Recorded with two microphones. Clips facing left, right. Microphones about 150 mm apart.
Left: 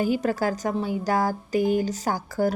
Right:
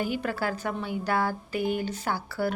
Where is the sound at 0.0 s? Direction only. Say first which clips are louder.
Left 6 dB; 40° left (ahead or behind).